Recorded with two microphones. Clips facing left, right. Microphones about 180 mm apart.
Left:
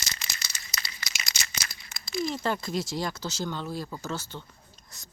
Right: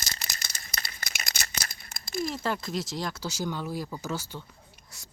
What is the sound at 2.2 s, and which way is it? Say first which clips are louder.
Speech: left 1 dB; centre (ahead or behind).